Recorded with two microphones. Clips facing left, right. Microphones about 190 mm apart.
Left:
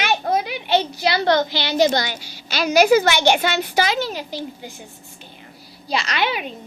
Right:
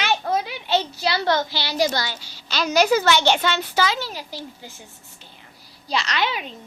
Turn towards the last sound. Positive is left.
turn(degrees=10)  # may be behind; listen again after turning